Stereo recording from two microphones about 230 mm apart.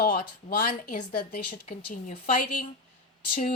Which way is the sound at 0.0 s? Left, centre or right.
Left.